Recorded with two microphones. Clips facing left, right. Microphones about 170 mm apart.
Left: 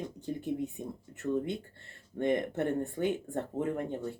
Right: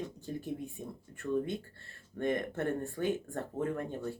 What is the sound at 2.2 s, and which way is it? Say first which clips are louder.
Speech: left 3 dB; 20° left (ahead or behind).